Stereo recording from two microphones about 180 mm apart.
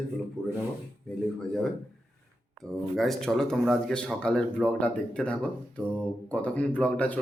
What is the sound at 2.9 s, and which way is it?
Speech, centre (ahead or behind).